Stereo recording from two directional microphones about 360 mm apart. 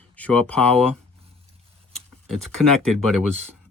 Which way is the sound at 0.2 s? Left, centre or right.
Centre.